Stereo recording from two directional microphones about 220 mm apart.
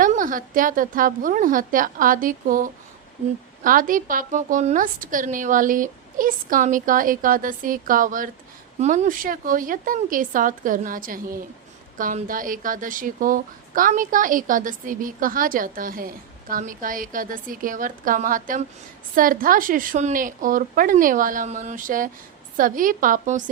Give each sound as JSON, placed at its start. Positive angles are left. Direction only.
{"t": 0.0, "sound": "speech", "side_deg": -40}